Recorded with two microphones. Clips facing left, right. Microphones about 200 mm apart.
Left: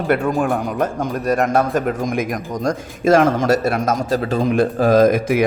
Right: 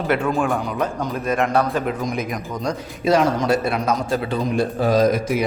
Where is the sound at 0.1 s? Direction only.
40° left (ahead or behind).